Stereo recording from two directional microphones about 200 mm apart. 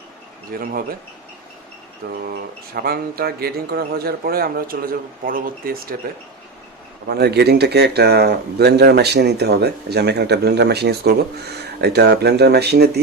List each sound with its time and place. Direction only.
0.6 s speech: 45° right (ahead or behind)
2.3 s speech: 50° right (ahead or behind)
7.1 s speech: 55° right (ahead or behind)